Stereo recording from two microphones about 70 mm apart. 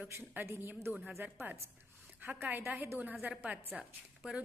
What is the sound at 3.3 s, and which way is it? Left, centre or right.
A woman's voice, right.